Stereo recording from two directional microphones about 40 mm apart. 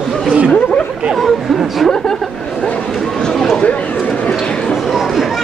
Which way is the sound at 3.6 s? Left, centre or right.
Left.